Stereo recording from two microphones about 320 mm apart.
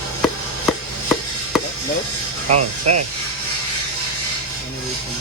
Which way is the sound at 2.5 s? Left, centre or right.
Right.